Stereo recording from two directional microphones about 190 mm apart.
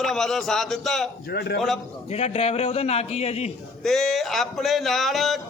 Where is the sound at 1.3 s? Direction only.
55° left (ahead or behind).